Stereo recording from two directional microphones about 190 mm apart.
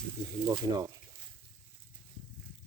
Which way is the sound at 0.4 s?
20° right (ahead or behind).